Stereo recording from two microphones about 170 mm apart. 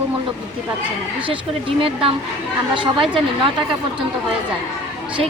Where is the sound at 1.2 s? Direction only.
35° right (ahead or behind).